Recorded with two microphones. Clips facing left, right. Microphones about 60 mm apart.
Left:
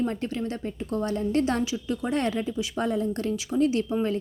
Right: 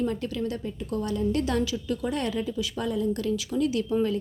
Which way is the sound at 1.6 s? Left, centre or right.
Left.